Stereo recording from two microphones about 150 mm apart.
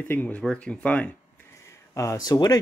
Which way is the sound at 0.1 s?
10° left (ahead or behind).